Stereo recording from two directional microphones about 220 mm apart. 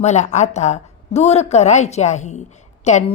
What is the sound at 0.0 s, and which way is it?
A woman's voice, 30° left (ahead or behind).